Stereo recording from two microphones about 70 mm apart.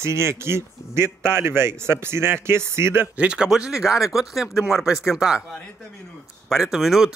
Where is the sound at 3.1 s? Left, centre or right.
Centre.